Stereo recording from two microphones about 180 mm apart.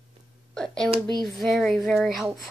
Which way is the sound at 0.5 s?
5° left (ahead or behind).